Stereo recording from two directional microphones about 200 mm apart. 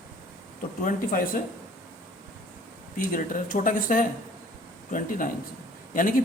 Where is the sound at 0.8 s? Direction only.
45° left (ahead or behind).